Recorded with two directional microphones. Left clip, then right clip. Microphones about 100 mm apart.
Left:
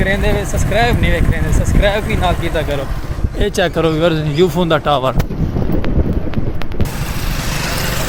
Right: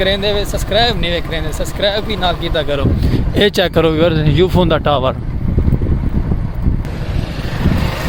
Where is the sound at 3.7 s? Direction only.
90° right.